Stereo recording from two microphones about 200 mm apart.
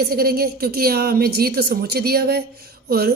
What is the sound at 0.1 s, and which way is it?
A woman's voice, 50° right (ahead or behind).